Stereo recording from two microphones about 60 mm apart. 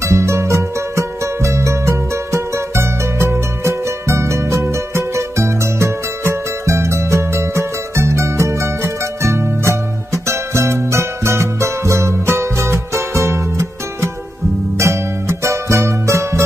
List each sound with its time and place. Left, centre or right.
0.0 s music: right